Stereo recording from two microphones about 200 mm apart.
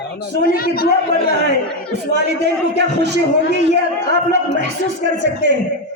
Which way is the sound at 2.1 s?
60° right (ahead or behind).